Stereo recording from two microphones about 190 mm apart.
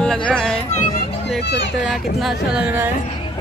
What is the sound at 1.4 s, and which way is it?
Speech, 65° left (ahead or behind).